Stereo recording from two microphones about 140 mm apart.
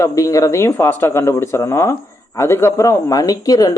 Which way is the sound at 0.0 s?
25° left (ahead or behind).